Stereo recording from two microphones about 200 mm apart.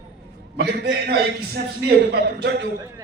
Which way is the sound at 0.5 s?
55° right (ahead or behind).